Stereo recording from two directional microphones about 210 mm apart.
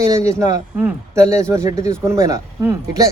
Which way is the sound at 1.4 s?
15° right (ahead or behind).